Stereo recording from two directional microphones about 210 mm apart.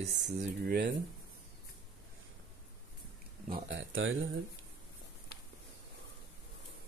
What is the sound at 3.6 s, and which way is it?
Speech, 65° right (ahead or behind).